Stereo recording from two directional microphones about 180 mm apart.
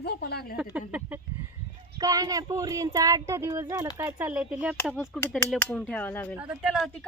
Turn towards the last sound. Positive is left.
turn(degrees=0)  # may be behind; listen again after turning